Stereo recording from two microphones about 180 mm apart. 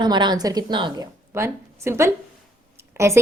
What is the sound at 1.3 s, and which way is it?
A woman's voice, 15° right (ahead or behind).